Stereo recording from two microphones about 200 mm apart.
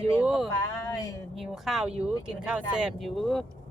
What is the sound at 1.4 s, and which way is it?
A woman's voice, centre (ahead or behind).